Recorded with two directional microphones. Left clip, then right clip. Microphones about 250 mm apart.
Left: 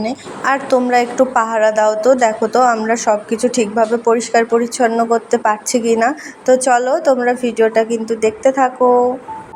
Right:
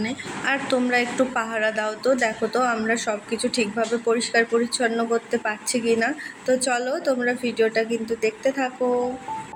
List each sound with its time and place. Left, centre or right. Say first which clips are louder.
0.4 s a woman's voice: left 9 dB; centre
5.7 s a woman's voice: left 3 dB; left
6.0 s a woman's voice: left 9 dB; centre